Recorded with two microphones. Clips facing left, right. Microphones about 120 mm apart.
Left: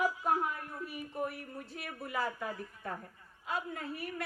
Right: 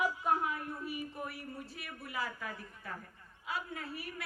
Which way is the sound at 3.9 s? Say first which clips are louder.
Left 4 dB; centre (ahead or behind).